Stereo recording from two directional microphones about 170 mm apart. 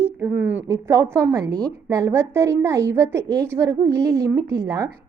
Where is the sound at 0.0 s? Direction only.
10° right (ahead or behind).